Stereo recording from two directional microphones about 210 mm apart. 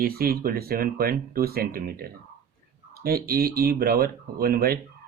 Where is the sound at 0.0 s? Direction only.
45° right (ahead or behind).